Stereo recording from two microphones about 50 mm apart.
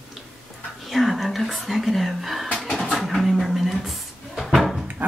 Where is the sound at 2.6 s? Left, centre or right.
Centre.